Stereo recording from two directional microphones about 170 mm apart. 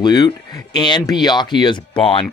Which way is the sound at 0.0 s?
25° left (ahead or behind).